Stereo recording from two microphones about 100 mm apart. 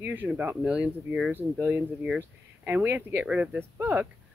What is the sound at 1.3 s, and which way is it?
Speech, 20° right (ahead or behind).